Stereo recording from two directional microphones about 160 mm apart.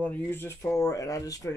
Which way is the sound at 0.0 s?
15° left (ahead or behind).